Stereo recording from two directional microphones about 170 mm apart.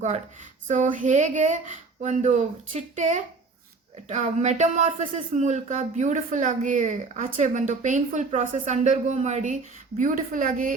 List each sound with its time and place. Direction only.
0.7 s speech: 50° right (ahead or behind)